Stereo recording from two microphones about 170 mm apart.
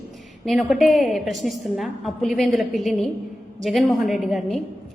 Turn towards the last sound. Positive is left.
turn(degrees=0)  # may be behind; listen again after turning